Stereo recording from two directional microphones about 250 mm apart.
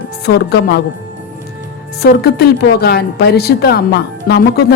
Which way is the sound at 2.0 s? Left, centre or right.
Left.